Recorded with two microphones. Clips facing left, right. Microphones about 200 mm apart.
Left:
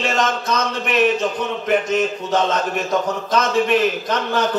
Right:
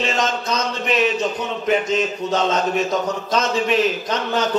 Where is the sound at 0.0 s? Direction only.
55° left (ahead or behind).